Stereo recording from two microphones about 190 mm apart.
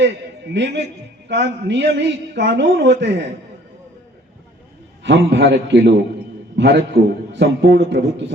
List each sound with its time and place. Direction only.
0.5 s a man's voice: 65° right (ahead or behind)
5.0 s a man's voice: 70° right (ahead or behind)